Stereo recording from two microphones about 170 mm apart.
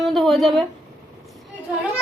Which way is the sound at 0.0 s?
Centre (ahead or behind).